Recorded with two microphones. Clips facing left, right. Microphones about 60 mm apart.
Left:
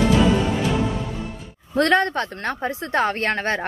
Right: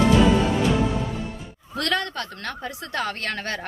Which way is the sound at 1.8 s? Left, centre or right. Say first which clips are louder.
Left 8 dB; left.